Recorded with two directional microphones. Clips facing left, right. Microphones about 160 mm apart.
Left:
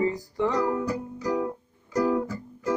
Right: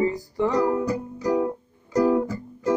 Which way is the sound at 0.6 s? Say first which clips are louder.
Right 4 dB; 25° right (ahead or behind).